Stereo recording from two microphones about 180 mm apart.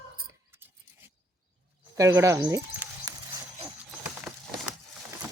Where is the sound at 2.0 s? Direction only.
15° right (ahead or behind).